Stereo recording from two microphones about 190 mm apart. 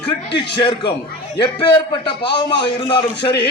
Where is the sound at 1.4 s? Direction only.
25° left (ahead or behind).